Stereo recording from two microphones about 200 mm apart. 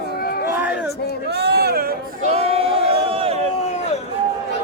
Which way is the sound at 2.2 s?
30° right (ahead or behind).